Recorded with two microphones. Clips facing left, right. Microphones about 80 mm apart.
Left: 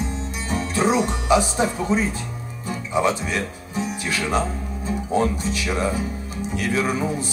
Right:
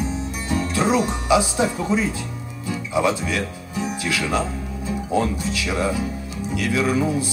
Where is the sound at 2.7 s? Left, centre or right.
Left.